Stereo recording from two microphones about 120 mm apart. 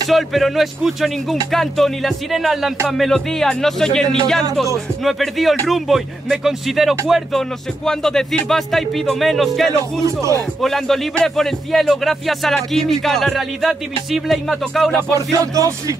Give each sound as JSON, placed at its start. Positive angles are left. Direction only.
{"t": 0.1, "sound": "speech", "side_deg": 0}
{"t": 15.1, "sound": "music", "side_deg": -25}